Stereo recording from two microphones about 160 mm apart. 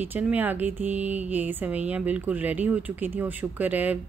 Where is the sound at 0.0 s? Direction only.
10° right (ahead or behind).